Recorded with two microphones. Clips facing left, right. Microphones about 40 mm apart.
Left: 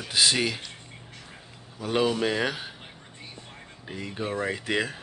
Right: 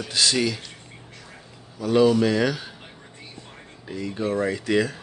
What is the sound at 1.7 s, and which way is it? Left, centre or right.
Speech, left.